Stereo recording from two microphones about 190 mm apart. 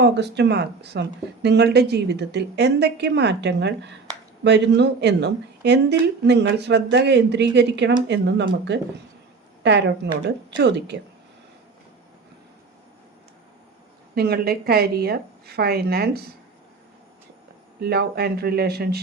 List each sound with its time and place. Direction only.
0.0 s speech: 60° right (ahead or behind)
9.6 s speech: 65° right (ahead or behind)
14.2 s speech: 55° right (ahead or behind)
17.7 s speech: 55° right (ahead or behind)